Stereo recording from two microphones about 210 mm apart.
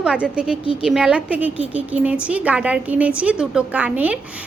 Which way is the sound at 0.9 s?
5° right (ahead or behind).